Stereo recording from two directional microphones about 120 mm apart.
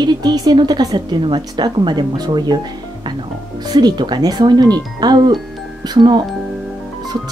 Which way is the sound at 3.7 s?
35° right (ahead or behind).